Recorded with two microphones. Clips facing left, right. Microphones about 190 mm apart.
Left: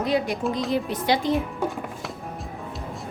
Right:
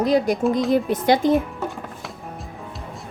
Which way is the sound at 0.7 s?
50° right (ahead or behind).